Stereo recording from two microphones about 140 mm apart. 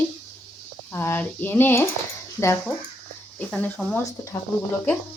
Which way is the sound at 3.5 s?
10° left (ahead or behind).